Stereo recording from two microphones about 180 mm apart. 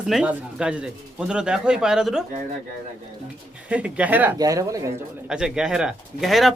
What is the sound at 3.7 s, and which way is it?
Speech, 5° right (ahead or behind).